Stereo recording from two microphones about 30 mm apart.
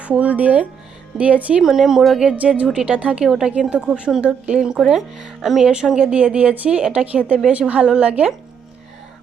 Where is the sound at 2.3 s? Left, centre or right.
Right.